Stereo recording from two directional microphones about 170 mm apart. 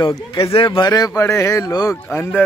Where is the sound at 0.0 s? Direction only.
25° left (ahead or behind).